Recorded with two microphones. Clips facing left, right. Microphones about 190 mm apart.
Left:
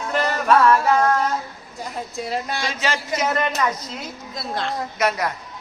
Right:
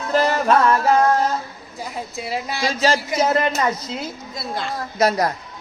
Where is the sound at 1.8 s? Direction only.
5° right (ahead or behind).